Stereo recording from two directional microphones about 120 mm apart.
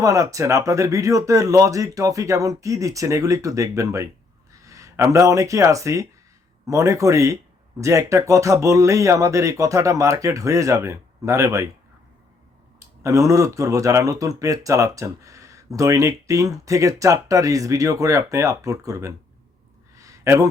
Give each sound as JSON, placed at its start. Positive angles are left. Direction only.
{"t": 0.0, "sound": "speech", "side_deg": -25}
{"t": 13.0, "sound": "speech", "side_deg": -25}
{"t": 20.0, "sound": "a sound", "side_deg": -25}